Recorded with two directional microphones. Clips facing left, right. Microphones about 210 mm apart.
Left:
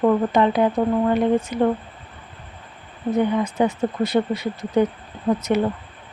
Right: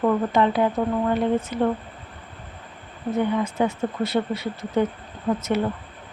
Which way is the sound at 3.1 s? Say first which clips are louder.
Left 3 dB; 15° left (ahead or behind).